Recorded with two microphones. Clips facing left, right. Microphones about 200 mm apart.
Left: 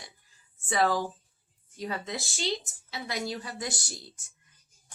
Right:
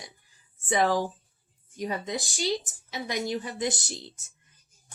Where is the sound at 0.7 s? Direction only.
20° right (ahead or behind).